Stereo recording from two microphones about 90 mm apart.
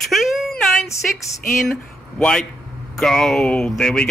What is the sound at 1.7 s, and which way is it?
A man's voice, 10° left (ahead or behind).